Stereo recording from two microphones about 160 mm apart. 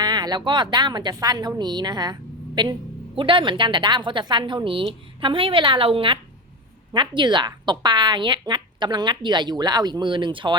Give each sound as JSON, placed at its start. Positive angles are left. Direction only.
{"t": 0.0, "sound": "a woman's voice", "side_deg": -25}
{"t": 3.2, "sound": "a woman's voice", "side_deg": -30}